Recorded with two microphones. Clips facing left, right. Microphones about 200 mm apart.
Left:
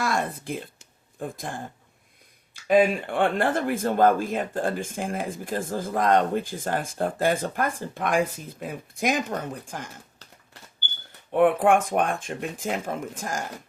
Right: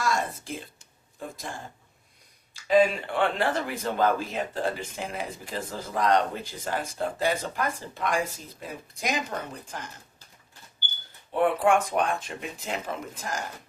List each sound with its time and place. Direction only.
0.0 s speech: 60° left (ahead or behind)
11.3 s speech: 55° left (ahead or behind)